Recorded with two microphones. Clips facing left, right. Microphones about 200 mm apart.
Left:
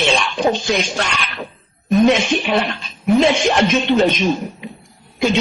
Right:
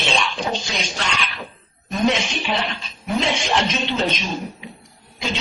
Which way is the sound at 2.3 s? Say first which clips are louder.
Left 7 dB; 55° left (ahead or behind).